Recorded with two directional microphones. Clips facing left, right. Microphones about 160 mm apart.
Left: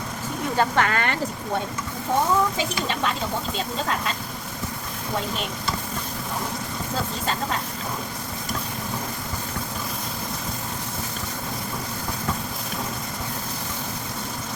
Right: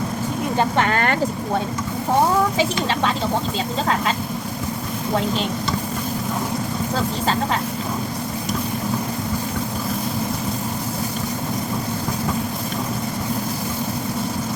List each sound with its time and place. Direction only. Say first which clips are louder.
0.5 s speech: right 2 dB; 20° right (ahead or behind)
0.9 s speech: right 5 dB; 45° right (ahead or behind)